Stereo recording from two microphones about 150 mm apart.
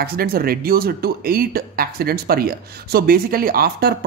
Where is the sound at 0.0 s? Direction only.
90° right.